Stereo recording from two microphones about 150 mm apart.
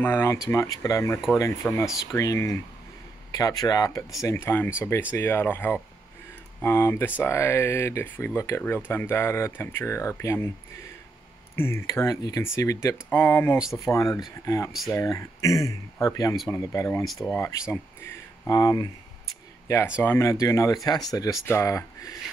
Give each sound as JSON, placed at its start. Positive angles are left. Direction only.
{"t": 0.0, "sound": "speech", "side_deg": 15}
{"t": 11.5, "sound": "speech", "side_deg": 15}
{"t": 13.6, "sound": "speech", "side_deg": 0}
{"t": 13.8, "sound": "speech", "side_deg": 20}
{"t": 14.7, "sound": "speech", "side_deg": 0}
{"t": 15.0, "sound": "speech", "side_deg": 20}
{"t": 17.0, "sound": "speech", "side_deg": 0}
{"t": 17.3, "sound": "speech", "side_deg": 15}
{"t": 20.0, "sound": "speech", "side_deg": 15}